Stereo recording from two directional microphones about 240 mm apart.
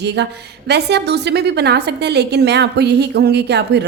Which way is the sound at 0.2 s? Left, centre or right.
Right.